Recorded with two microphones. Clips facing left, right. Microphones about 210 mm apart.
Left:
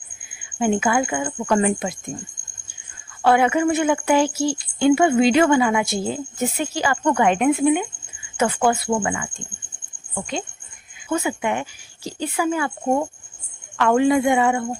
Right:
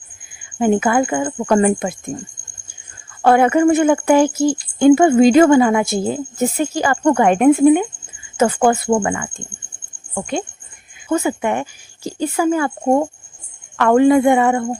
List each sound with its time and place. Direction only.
0.6 s a woman's voice: 50° right (ahead or behind)
3.2 s a woman's voice: 50° right (ahead or behind)